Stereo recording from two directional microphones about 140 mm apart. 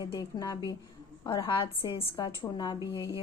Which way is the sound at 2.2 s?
30° left (ahead or behind).